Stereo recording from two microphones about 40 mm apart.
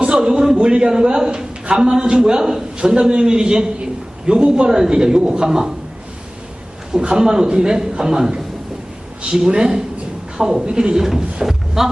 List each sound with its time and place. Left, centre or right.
0.0 s a man's voice: centre
2.7 s a man's voice: right
7.0 s a man's voice: right
9.5 s a man's voice: centre
11.4 s a sound: centre